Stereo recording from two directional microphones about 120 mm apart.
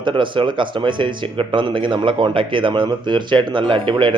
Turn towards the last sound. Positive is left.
turn(degrees=-40)  # may be behind; listen again after turning